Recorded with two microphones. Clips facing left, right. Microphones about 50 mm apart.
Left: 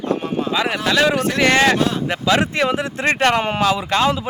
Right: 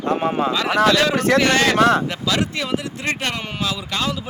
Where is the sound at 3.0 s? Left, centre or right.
Left.